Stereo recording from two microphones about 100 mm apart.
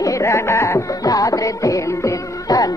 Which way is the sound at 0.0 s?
30° left (ahead or behind).